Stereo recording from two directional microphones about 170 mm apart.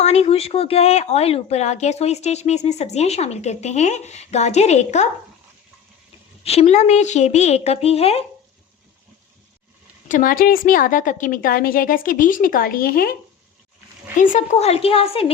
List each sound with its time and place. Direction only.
0.0 s speech: 40° left (ahead or behind)
6.4 s speech: 35° left (ahead or behind)
10.1 s a woman's voice: 55° left (ahead or behind)
14.2 s speech: 40° left (ahead or behind)